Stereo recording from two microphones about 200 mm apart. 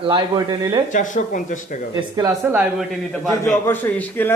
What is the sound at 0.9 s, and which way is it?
Speech, 40° left (ahead or behind).